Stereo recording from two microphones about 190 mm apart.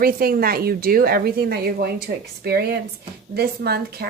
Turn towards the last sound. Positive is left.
turn(degrees=-55)  # may be behind; listen again after turning